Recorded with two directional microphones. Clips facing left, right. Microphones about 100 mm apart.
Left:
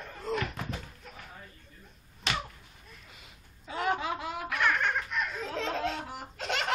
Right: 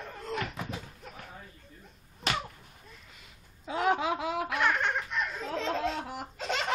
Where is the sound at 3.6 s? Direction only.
70° right (ahead or behind).